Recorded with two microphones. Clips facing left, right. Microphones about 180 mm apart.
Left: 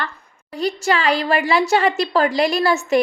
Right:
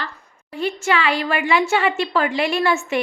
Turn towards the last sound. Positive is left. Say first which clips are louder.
# left 3 dB
turn(degrees=40)  # may be behind; listen again after turning